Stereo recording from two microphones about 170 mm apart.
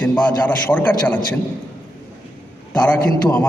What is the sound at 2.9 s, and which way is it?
Speech, 10° left (ahead or behind).